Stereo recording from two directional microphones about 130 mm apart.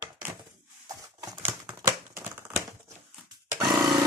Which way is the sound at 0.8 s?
30° right (ahead or behind).